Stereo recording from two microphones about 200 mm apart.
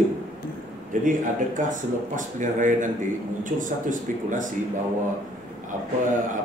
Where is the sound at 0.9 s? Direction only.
40° right (ahead or behind).